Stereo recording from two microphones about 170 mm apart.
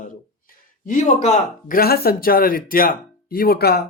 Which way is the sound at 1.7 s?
65° left (ahead or behind).